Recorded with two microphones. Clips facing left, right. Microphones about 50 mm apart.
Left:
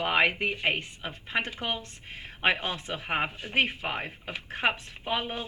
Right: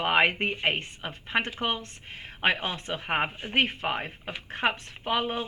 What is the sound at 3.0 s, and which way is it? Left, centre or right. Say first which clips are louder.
Speech: right 2 dB; right.